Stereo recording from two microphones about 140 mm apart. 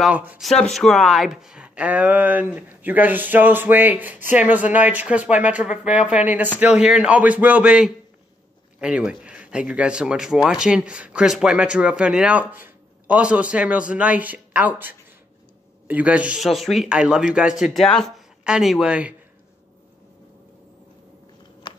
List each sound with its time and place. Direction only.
0.0 s speech: 10° right (ahead or behind)
0.4 s a man's voice: centre (ahead or behind)
21.7 s a sound: 35° left (ahead or behind)